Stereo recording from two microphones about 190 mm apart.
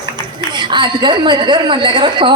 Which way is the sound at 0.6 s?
25° right (ahead or behind).